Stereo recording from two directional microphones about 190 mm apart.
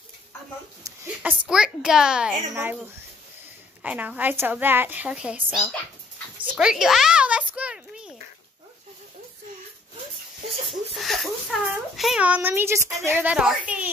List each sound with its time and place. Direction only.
0.8 s a woman's voice: 10° right (ahead or behind)
11.0 s a woman's voice: centre (ahead or behind)